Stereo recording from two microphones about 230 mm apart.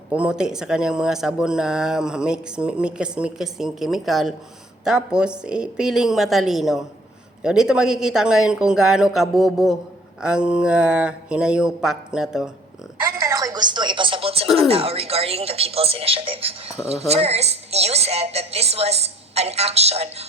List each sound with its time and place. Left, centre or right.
0.1 s speech: centre
13.1 s music: centre
14.7 s a woman's voice: right